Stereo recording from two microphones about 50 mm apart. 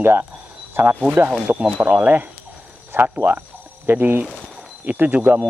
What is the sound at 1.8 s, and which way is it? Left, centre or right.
Speech, right.